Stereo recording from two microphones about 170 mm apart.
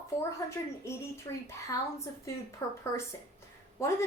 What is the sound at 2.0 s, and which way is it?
A woman's voice, 15° left (ahead or behind).